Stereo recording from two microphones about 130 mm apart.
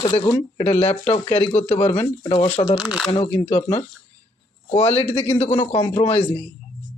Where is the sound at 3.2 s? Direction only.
35° left (ahead or behind).